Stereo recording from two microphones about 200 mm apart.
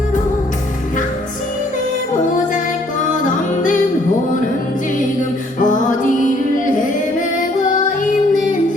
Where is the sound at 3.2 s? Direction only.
40° left (ahead or behind).